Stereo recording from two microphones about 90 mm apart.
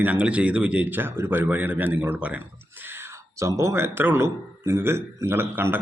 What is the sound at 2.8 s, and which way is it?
Whispering, 25° right (ahead or behind).